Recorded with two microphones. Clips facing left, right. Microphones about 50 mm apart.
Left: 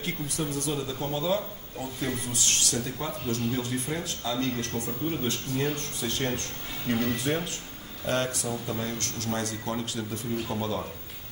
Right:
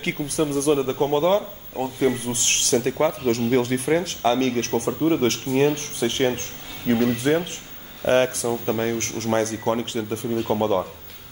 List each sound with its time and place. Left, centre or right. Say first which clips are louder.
0.0 s speech: right 8 dB; right
5.8 s speech: right 8 dB; right